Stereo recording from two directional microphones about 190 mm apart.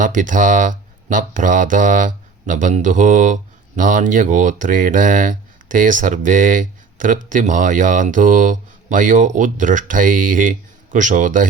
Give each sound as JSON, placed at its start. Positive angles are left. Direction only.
{"t": 0.0, "sound": "speech", "side_deg": -45}